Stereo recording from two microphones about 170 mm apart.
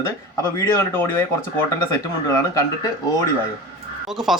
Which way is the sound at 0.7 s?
15° left (ahead or behind).